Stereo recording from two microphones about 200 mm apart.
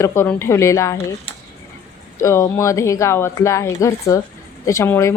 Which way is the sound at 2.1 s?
15° left (ahead or behind).